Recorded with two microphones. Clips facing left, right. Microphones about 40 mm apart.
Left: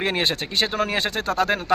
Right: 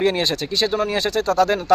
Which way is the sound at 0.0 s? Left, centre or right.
Left.